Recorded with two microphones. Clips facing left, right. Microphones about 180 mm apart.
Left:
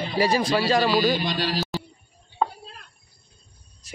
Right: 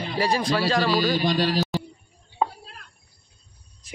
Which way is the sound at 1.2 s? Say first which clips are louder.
Right 4 dB; 45° right (ahead or behind).